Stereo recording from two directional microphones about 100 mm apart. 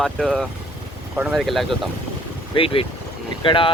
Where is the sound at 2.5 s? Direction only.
60° left (ahead or behind).